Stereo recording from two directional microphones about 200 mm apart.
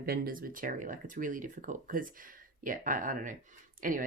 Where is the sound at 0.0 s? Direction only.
45° right (ahead or behind).